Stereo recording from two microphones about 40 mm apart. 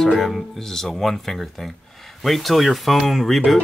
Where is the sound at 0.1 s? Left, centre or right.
Centre.